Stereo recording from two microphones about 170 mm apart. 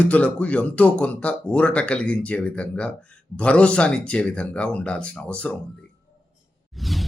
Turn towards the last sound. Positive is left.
turn(degrees=0)  # may be behind; listen again after turning